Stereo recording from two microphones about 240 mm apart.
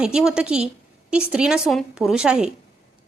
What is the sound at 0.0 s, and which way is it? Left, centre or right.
A woman's voice, centre.